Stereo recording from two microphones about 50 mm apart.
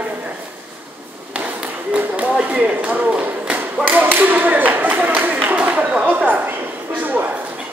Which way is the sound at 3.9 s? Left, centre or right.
Right.